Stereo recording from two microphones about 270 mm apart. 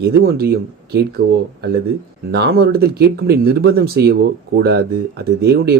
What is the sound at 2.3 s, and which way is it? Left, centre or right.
Speech, right.